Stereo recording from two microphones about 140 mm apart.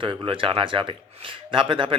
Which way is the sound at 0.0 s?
40° right (ahead or behind).